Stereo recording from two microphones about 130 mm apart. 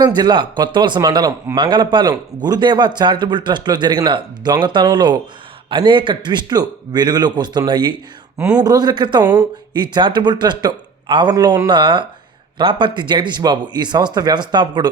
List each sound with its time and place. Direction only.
0.0 s a man's voice: 30° right (ahead or behind)
11.7 s a man's voice: 40° right (ahead or behind)